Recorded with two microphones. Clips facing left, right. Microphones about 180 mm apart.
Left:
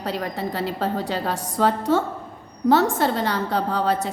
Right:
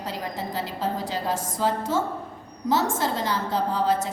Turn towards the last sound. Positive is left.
turn(degrees=65)  # may be behind; listen again after turning